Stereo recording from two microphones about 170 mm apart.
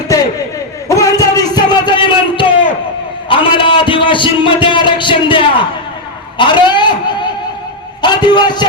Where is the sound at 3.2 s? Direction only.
30° left (ahead or behind).